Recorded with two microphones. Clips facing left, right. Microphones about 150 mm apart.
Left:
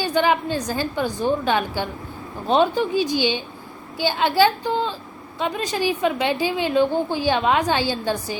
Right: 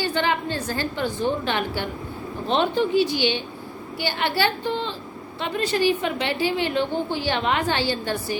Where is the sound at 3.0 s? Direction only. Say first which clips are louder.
Even; 15° left (ahead or behind).